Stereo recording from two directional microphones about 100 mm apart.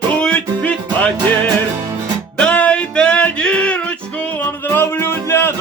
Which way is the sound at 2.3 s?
10° left (ahead or behind).